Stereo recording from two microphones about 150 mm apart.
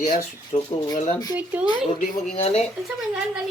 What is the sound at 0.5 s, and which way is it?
Speech, 45° left (ahead or behind).